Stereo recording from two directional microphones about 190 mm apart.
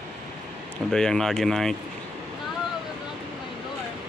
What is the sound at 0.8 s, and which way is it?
Speech, 5° left (ahead or behind).